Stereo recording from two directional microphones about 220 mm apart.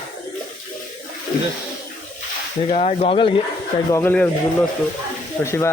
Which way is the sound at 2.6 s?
30° left (ahead or behind).